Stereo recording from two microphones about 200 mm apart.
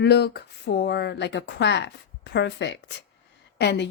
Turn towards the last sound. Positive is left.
turn(degrees=55)  # may be behind; listen again after turning